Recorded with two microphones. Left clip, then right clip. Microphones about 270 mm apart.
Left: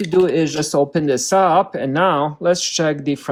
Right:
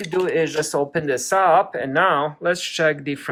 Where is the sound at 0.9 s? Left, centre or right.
Left.